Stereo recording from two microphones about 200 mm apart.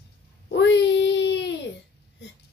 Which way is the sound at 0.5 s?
60° left (ahead or behind).